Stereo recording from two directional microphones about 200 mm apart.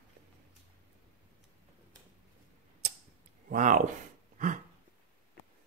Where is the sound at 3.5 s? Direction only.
40° right (ahead or behind).